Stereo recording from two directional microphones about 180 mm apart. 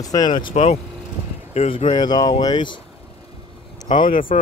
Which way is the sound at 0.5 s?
35° left (ahead or behind).